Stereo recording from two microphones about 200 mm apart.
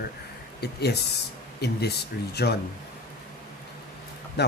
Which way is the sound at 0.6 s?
55° left (ahead or behind).